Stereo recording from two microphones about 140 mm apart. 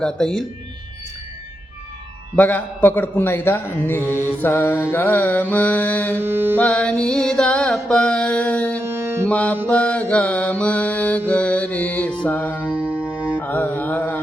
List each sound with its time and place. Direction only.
0.0 s speech: 5° left (ahead or behind)
2.3 s speech: 10° left (ahead or behind)
6.1 s music: 15° right (ahead or behind)
6.6 s speech: 10° left (ahead or behind)
8.8 s music: 20° right (ahead or behind)
9.3 s speech: 10° left (ahead or behind)
12.5 s music: 10° right (ahead or behind)
13.4 s mantra: 15° left (ahead or behind)